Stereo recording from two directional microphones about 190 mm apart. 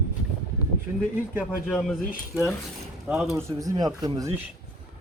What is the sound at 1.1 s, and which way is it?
Speech, 10° right (ahead or behind).